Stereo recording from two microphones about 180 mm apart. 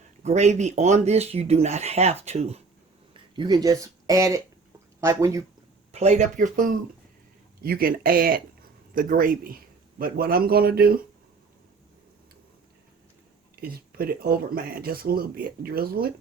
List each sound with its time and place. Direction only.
0.2 s speech: 40° right (ahead or behind)
3.3 s speech: 25° right (ahead or behind)
5.9 s speech: 35° right (ahead or behind)
7.6 s speech: 55° right (ahead or behind)
13.6 s speech: 55° right (ahead or behind)